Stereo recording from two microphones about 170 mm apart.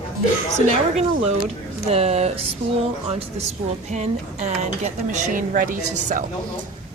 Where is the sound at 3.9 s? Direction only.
40° right (ahead or behind).